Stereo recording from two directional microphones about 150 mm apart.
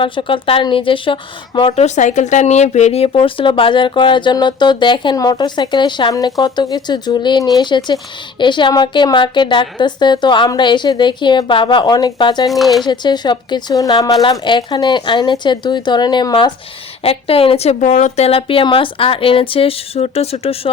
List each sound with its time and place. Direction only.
0.0 s speech: 35° left (ahead or behind)
1.8 s speech: 55° left (ahead or behind); by 12.5 s 30° left (ahead or behind)
12.5 s speech: centre (ahead or behind)
12.8 s a woman's voice: 30° left (ahead or behind)